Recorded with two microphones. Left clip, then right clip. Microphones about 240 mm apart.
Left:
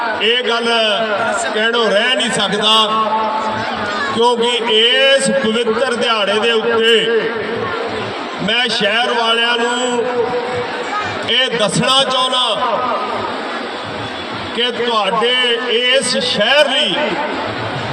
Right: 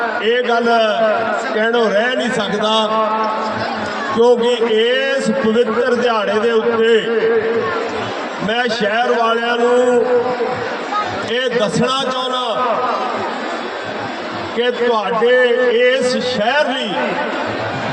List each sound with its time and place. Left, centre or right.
0.3 s a man's voice: left
4.2 s a man's voice: left
8.4 s a man's voice: left
11.3 s a man's voice: left
14.6 s a man's voice: left